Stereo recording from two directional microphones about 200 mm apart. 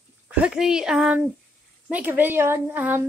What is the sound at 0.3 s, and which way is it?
A woman's voice, 5° right (ahead or behind).